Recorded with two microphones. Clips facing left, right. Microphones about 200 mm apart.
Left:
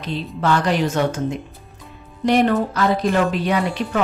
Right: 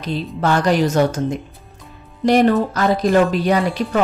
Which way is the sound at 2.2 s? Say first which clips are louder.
Right 3 dB; 40° right (ahead or behind).